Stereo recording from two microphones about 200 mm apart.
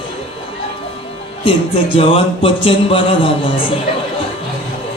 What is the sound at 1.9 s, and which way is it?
Music, 25° left (ahead or behind).